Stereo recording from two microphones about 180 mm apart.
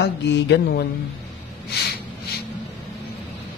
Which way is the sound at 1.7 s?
65° left (ahead or behind).